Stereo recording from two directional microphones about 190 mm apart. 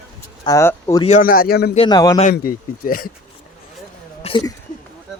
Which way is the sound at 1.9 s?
20° left (ahead or behind).